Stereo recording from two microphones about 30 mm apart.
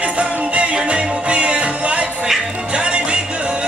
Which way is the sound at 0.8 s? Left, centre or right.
Right.